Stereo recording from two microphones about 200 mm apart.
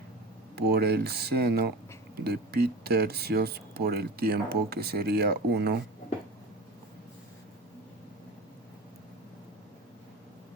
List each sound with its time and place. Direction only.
0.5 s speech: 55° right (ahead or behind)